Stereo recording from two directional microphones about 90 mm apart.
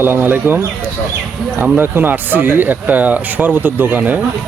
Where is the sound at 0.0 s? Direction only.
20° right (ahead or behind).